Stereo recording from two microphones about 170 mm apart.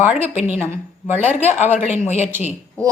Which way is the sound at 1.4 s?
40° left (ahead or behind).